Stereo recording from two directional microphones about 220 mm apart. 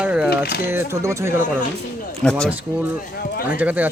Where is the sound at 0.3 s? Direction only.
45° left (ahead or behind).